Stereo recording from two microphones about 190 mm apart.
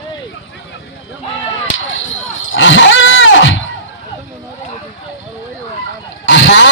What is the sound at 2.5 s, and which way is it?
Roaring cats, 90° left.